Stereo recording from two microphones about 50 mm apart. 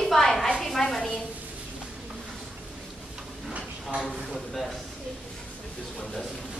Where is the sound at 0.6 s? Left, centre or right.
Centre.